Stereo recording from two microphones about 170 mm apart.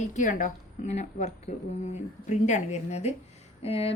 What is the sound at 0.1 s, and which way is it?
A woman's voice, 50° left (ahead or behind).